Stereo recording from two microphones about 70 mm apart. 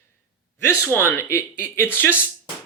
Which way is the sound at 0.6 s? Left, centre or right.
Left.